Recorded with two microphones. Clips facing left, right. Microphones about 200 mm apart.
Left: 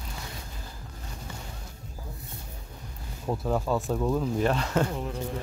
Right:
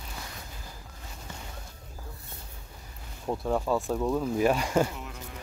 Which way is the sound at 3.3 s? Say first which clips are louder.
Even; centre (ahead or behind).